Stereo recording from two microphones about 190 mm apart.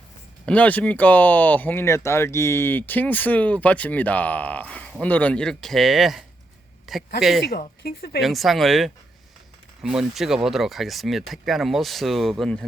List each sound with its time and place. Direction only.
0.4 s speech: 5° left (ahead or behind)
7.9 s speech: 55° left (ahead or behind)
8.2 s speech: centre (ahead or behind)